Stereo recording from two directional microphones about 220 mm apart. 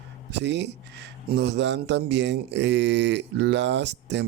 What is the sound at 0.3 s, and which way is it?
Speech, 50° right (ahead or behind).